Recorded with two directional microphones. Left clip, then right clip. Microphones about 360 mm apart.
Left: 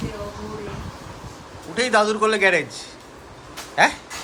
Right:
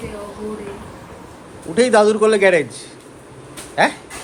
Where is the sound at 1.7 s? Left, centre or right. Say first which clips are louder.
Right 6 dB; centre.